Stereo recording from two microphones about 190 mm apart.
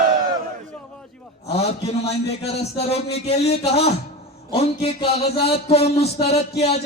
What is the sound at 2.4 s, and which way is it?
A man's voice, 35° left (ahead or behind).